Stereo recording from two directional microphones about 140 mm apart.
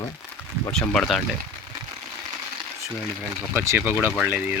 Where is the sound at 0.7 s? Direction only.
Centre (ahead or behind).